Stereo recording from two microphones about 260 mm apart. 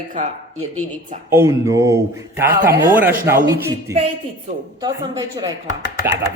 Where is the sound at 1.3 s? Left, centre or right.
Centre.